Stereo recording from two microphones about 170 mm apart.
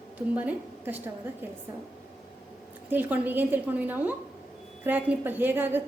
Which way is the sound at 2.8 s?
10° right (ahead or behind).